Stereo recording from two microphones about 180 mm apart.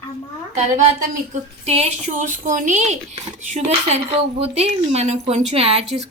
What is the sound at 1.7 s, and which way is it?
Speech, 40° right (ahead or behind).